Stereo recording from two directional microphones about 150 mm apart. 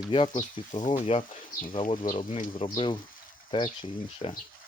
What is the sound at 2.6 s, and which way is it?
Speech, 35° left (ahead or behind).